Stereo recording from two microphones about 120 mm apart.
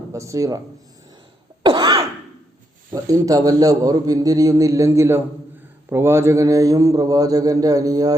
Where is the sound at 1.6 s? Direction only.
40° right (ahead or behind).